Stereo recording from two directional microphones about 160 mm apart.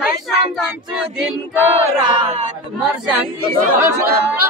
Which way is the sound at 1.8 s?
35° right (ahead or behind).